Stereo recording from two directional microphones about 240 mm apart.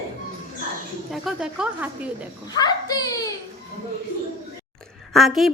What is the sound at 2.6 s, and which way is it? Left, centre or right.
Speech, centre.